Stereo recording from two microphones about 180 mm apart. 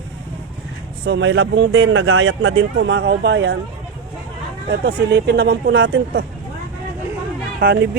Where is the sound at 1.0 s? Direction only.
80° right.